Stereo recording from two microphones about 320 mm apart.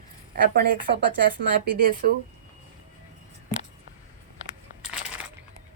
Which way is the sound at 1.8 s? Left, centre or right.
Right.